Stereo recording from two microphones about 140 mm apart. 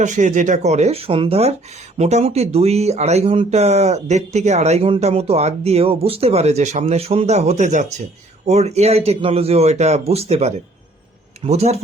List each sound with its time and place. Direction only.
0.0 s speech: 60° right (ahead or behind)